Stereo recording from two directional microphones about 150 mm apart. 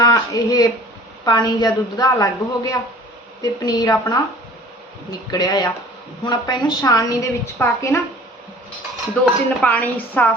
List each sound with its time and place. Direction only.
0.0 s a woman's voice: 25° left (ahead or behind)
5.3 s a woman's voice: 25° left (ahead or behind)
9.6 s speech: 10° left (ahead or behind)